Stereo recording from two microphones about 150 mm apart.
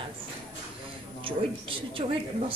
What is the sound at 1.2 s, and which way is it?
Speech, 35° right (ahead or behind).